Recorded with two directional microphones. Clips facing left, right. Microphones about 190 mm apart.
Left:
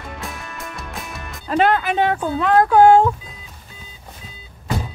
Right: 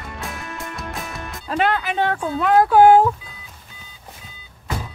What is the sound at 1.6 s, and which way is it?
Speech, 50° left (ahead or behind).